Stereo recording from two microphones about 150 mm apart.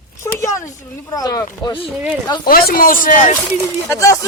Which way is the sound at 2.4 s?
80° left.